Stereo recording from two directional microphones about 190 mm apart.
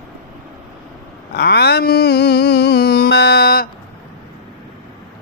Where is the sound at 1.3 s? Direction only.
60° left (ahead or behind).